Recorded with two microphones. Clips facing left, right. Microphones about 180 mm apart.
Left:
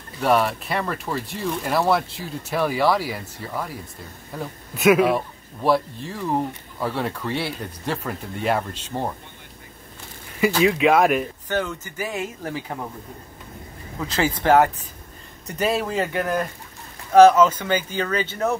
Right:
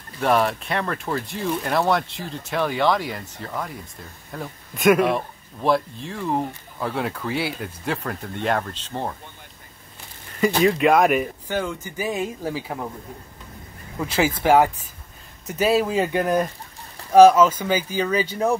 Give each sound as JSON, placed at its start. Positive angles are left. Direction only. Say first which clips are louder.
{"t": 0.2, "sound": "a man's voice", "louder": "even", "side_deg": 0}
{"t": 10.6, "sound": "speech", "louder": "even", "side_deg": 0}
{"t": 13.9, "sound": "speech", "louder": "right 2 dB", "side_deg": -10}